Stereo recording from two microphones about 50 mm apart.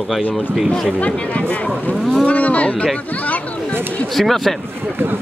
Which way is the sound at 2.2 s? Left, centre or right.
Left.